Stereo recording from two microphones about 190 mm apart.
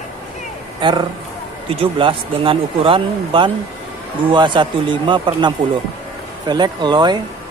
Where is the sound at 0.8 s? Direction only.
25° right (ahead or behind).